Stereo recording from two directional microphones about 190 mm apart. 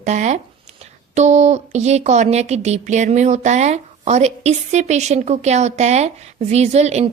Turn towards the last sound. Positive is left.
turn(degrees=-35)  # may be behind; listen again after turning